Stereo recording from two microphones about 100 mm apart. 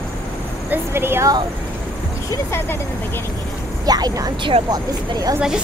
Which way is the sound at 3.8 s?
40° right (ahead or behind).